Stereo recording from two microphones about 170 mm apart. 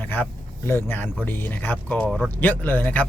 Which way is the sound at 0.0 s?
10° left (ahead or behind).